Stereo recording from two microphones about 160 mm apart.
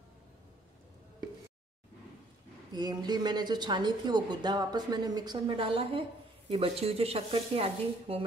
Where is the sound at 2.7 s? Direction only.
25° right (ahead or behind).